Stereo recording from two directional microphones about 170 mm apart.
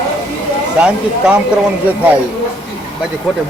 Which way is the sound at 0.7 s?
5° right (ahead or behind).